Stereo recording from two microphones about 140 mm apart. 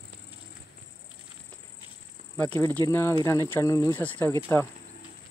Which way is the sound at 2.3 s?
15° left (ahead or behind).